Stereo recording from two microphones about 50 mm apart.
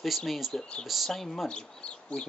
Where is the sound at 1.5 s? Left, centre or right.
Centre.